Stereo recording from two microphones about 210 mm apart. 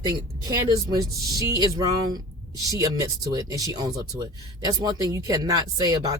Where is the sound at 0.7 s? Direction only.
20° right (ahead or behind).